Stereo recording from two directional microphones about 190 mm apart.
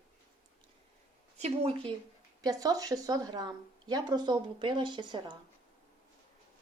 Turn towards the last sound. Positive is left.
turn(degrees=-25)  # may be behind; listen again after turning